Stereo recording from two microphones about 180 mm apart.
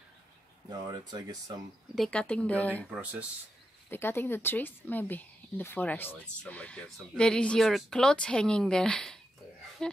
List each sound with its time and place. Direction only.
0.7 s speech: 25° right (ahead or behind)
2.0 s a woman's voice: 5° left (ahead or behind)
2.9 s speech: 10° right (ahead or behind)
3.9 s a woman's voice: 10° left (ahead or behind)
9.8 s a sound: 5° left (ahead or behind)